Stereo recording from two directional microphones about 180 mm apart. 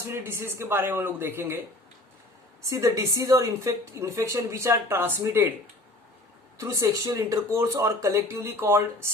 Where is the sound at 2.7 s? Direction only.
15° right (ahead or behind).